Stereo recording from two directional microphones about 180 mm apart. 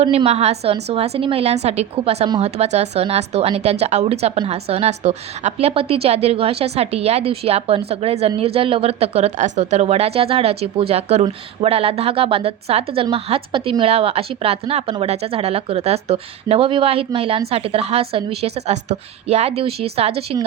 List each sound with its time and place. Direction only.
0.0 s speech: 35° right (ahead or behind)